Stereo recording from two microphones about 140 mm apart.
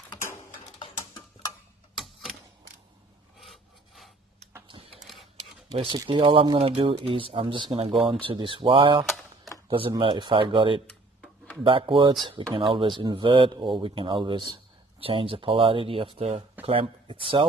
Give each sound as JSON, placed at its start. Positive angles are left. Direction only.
{"t": 3.3, "sound": "filing", "side_deg": 0}
{"t": 5.7, "sound": "speech", "side_deg": -40}